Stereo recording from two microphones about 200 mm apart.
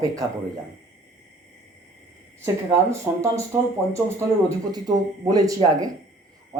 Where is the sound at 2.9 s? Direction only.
15° right (ahead or behind).